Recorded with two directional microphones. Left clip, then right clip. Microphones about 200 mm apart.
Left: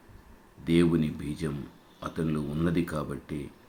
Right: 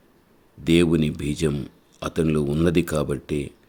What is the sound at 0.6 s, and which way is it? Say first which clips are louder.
Speech: right 6 dB; 55° right (ahead or behind).